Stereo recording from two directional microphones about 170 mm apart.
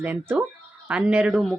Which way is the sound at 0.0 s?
10° right (ahead or behind).